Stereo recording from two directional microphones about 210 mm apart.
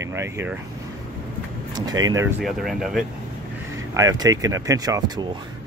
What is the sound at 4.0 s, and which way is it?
Speech, 15° right (ahead or behind).